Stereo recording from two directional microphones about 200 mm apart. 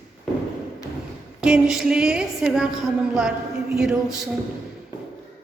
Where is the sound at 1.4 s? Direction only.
5° right (ahead or behind).